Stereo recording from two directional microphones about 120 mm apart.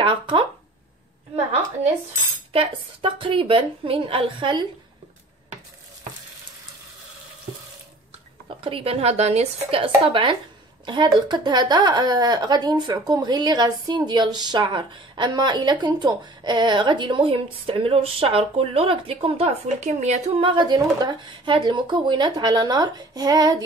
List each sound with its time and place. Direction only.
0.0 s a woman's voice: 45° right (ahead or behind)
2.5 s a woman's voice: 50° right (ahead or behind)
8.6 s a woman's voice: 50° right (ahead or behind); by 20.2 s 70° right (ahead or behind)
20.3 s a woman's voice: 45° right (ahead or behind)